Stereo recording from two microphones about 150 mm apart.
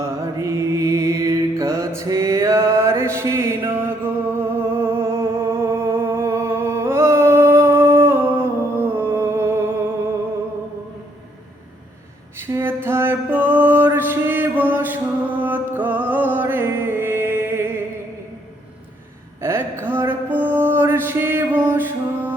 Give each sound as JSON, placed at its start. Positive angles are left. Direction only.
{"t": 0.0, "sound": "mantra", "side_deg": -20}
{"t": 12.4, "sound": "a sound", "side_deg": -15}
{"t": 15.4, "sound": "music", "side_deg": -10}
{"t": 19.4, "sound": "music", "side_deg": -15}